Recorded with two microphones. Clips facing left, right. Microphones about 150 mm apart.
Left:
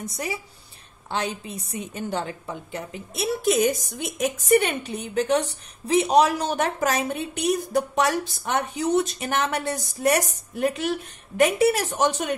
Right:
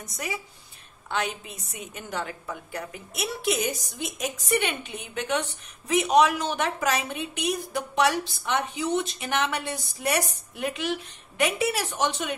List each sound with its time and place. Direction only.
0.0 s a woman's voice: 30° left (ahead or behind)
3.4 s a woman's voice: 55° left (ahead or behind)